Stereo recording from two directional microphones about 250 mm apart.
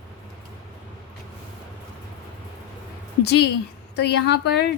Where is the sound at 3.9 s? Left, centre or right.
Left.